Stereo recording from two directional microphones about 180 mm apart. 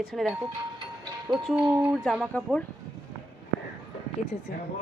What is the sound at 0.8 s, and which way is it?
Music, 25° right (ahead or behind).